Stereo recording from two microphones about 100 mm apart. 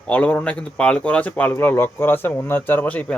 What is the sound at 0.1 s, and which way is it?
Speech, 15° left (ahead or behind).